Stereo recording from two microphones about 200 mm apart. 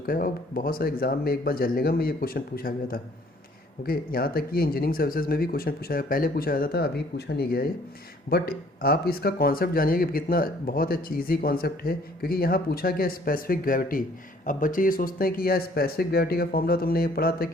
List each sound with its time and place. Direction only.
0.0 s speech: 45° left (ahead or behind)